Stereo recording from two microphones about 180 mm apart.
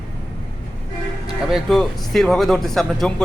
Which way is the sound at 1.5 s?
Centre (ahead or behind).